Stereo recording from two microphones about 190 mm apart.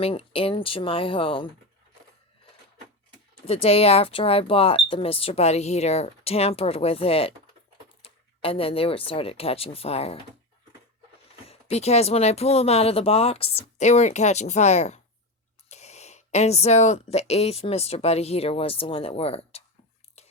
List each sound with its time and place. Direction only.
0.0 s speech: 30° left (ahead or behind)
3.3 s speech: 30° left (ahead or behind)
11.4 s speech: 35° left (ahead or behind)
20.2 s a sound: 35° left (ahead or behind)